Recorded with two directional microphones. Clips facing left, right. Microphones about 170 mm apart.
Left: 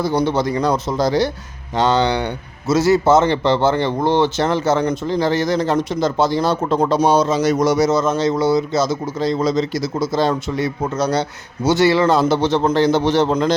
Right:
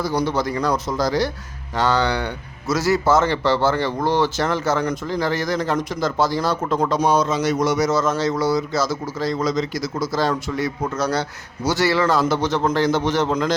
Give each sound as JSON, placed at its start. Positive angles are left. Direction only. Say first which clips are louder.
{"t": 0.0, "sound": "a man's voice", "louder": "left 4 dB", "side_deg": 25}
{"t": 7.8, "sound": "a man's voice", "louder": "left 3 dB", "side_deg": 20}